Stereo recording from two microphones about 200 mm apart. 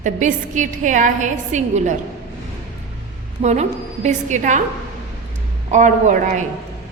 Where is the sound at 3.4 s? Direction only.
35° right (ahead or behind).